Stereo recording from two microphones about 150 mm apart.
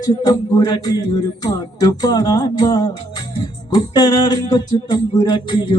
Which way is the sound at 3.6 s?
25° left (ahead or behind).